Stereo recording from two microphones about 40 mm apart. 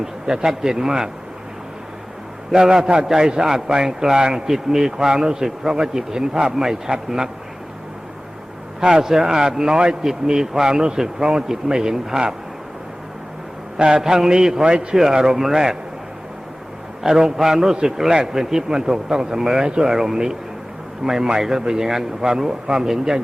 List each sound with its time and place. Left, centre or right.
0.0 s a man's voice: centre
2.5 s a man's voice: centre
8.8 s a man's voice: centre
13.7 s a man's voice: right
14.0 s a man's voice: centre
14.9 s a man's voice: centre
17.2 s a man's voice: centre
19.9 s a man's voice: centre